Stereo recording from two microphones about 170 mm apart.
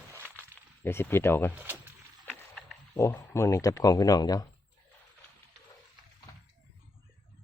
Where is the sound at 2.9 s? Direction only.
15° left (ahead or behind).